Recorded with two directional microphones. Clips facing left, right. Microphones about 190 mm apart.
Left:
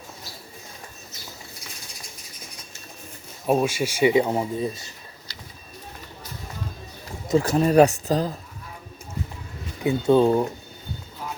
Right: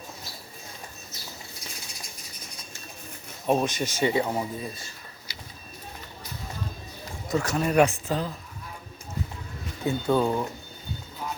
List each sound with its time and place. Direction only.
3.4 s speech: 5° left (ahead or behind); by 4.7 s 25° left (ahead or behind)
7.3 s speech: 30° left (ahead or behind)
9.8 s speech: 20° left (ahead or behind)